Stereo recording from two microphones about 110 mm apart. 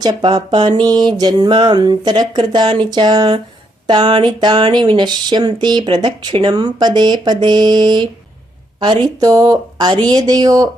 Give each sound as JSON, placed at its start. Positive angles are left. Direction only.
{"t": 0.0, "sound": "speech", "side_deg": -45}